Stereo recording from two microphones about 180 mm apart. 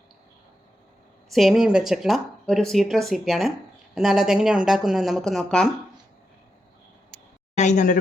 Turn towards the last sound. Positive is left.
turn(degrees=45)  # may be behind; listen again after turning